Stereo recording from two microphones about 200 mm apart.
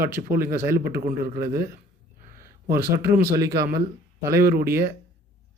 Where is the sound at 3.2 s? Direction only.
50° right (ahead or behind).